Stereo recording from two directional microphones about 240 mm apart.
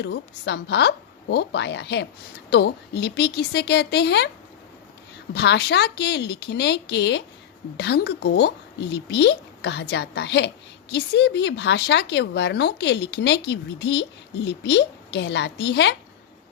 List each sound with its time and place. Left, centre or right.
0.0 s speech: left
5.3 s speech: left